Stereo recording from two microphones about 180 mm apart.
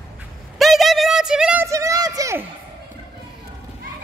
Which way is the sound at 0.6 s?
Centre (ahead or behind).